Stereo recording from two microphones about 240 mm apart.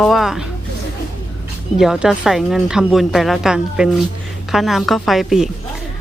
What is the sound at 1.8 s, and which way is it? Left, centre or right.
A woman's voice, centre.